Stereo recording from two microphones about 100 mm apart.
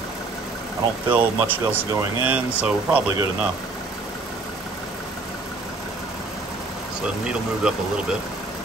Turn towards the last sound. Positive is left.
turn(degrees=-10)  # may be behind; listen again after turning